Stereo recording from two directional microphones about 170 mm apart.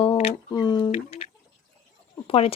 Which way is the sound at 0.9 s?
35° left (ahead or behind).